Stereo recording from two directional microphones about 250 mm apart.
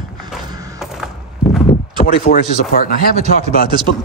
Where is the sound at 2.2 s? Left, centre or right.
Left.